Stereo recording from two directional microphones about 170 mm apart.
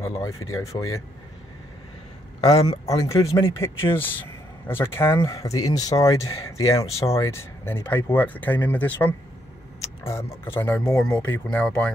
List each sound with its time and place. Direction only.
0.2 s speech: 15° left (ahead or behind)
2.4 s speech: 20° left (ahead or behind)
11.0 s speech: 5° left (ahead or behind)